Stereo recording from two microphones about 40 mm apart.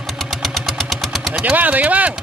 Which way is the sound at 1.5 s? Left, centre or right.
Right.